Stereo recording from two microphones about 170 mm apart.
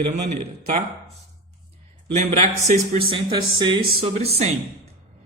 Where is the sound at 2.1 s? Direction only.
40° right (ahead or behind).